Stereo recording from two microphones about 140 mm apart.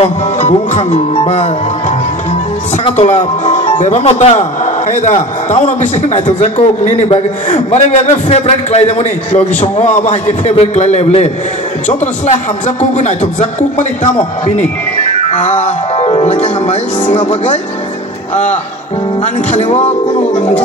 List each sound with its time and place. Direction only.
0.0 s a man's voice: 50° left (ahead or behind)
12.6 s speech: 60° left (ahead or behind)
15.3 s speech: 50° left (ahead or behind)
18.3 s a man's voice: 55° left (ahead or behind)